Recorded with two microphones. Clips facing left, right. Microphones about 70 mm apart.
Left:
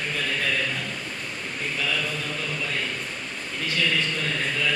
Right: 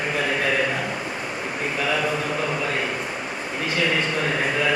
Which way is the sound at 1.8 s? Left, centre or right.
Right.